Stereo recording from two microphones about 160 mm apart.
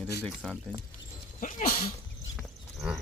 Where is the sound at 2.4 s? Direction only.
Centre (ahead or behind).